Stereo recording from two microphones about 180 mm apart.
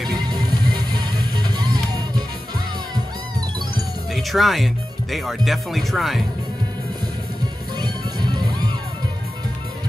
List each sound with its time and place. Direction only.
0.1 s music: 25° right (ahead or behind)
4.1 s music: centre (ahead or behind)
5.1 s speech: centre (ahead or behind)
7.8 s music: 25° right (ahead or behind)